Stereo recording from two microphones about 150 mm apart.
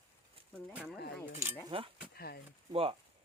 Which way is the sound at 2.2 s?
90° left.